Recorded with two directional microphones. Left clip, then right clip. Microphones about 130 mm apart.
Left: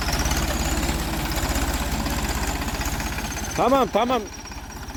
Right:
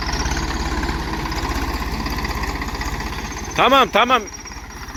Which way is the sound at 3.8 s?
20° left (ahead or behind).